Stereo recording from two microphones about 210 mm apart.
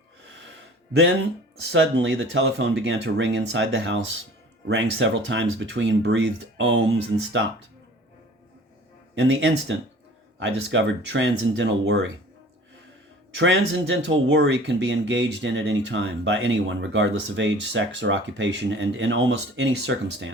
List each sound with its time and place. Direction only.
0.3 s gasp: 65° right (ahead or behind)
1.7 s speech: 60° right (ahead or behind)
9.2 s speech: 60° right (ahead or behind)
13.3 s speech: 65° right (ahead or behind)